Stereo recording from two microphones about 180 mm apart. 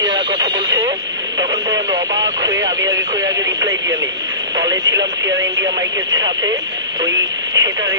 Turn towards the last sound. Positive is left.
turn(degrees=-20)  # may be behind; listen again after turning